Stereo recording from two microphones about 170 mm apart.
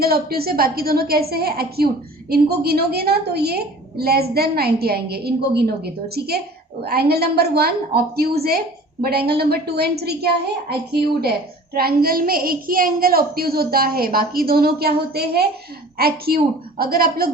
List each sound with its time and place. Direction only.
0.0 s a woman's voice: 65° right (ahead or behind)